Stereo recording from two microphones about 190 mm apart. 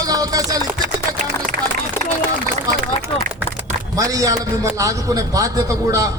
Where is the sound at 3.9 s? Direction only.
20° right (ahead or behind).